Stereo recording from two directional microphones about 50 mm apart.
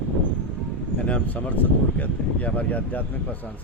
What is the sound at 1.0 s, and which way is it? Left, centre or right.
Speech, left.